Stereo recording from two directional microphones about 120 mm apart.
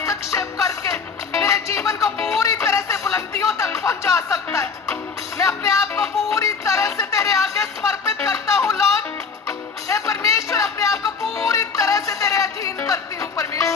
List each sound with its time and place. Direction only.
0.0 s music: 25° left (ahead or behind)